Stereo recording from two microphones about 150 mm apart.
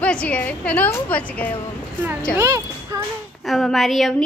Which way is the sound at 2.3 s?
20° right (ahead or behind).